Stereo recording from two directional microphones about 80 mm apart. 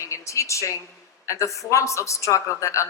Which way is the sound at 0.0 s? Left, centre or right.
Left.